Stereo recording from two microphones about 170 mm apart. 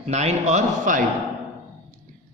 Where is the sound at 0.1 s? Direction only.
40° right (ahead or behind).